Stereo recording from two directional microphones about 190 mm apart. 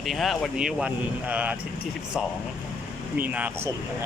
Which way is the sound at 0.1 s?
Centre (ahead or behind).